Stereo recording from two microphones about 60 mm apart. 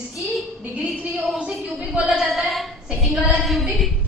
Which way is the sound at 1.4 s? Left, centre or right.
Centre.